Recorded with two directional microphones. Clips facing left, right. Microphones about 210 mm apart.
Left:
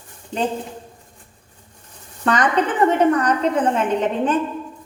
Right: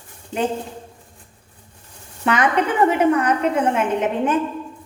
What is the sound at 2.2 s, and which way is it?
A woman's voice, 10° right (ahead or behind).